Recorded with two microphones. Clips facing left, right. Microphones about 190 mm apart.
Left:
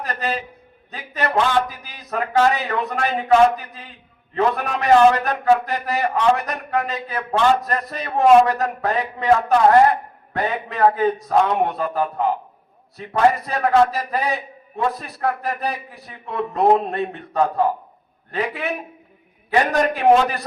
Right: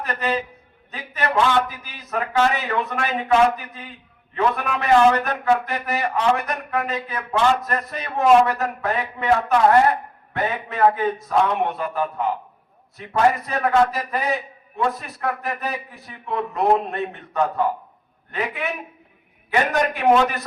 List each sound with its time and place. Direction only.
0.0 s a man's voice: 35° left (ahead or behind)